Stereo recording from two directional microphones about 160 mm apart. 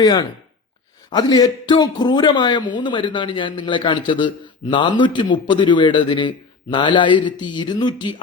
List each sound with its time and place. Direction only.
0.0 s a man's voice: 25° left (ahead or behind)